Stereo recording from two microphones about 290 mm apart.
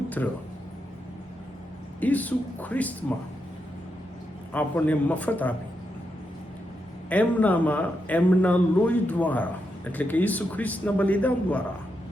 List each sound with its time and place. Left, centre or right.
0.2 s speech: centre
2.0 s a man's voice: centre
4.5 s a man's voice: centre
7.1 s a man's voice: centre